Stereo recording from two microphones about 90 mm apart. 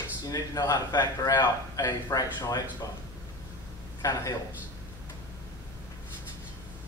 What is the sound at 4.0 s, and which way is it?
Speech, 40° left (ahead or behind).